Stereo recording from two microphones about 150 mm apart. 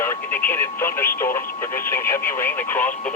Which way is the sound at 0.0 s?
15° left (ahead or behind).